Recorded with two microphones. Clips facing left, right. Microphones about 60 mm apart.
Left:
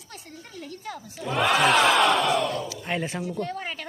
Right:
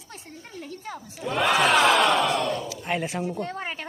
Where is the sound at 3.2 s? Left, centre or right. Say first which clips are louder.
Right 1 dB; right.